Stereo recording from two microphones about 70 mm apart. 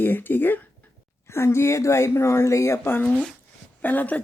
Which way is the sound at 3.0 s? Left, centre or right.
Centre.